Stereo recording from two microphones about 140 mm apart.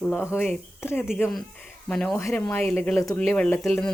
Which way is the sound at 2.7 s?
5° left (ahead or behind).